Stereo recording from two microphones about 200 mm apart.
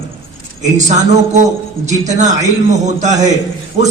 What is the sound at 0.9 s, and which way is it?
A man's voice, 35° right (ahead or behind).